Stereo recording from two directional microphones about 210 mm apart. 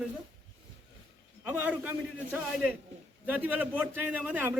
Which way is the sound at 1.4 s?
10° right (ahead or behind).